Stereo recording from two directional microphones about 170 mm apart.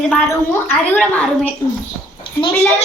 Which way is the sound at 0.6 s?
10° left (ahead or behind).